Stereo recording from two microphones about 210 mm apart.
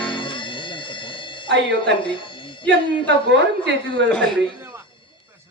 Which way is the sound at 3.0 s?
60° right (ahead or behind).